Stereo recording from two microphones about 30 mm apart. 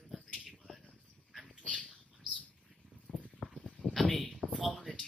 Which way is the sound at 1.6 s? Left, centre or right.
Left.